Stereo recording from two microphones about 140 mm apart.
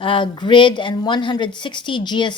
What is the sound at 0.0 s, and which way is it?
A woman's voice, 35° left (ahead or behind).